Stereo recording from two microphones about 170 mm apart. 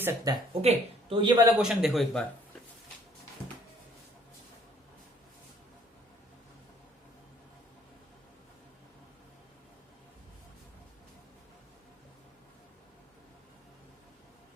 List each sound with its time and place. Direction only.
0.3 s speech: 20° right (ahead or behind)
0.6 s speech: 35° right (ahead or behind)
1.5 s a man's voice: 5° right (ahead or behind)